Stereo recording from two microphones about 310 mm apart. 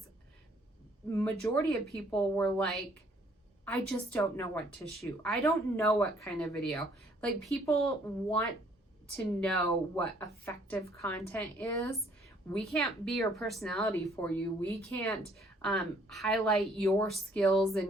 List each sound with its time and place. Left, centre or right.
1.1 s a woman's voice: centre